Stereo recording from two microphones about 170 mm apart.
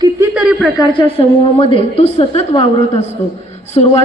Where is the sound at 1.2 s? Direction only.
35° left (ahead or behind).